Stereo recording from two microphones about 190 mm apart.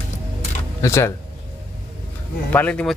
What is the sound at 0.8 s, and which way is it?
Speech, 15° left (ahead or behind).